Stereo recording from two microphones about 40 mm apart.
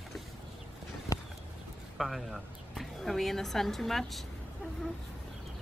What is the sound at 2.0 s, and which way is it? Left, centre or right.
A woman's voice, centre.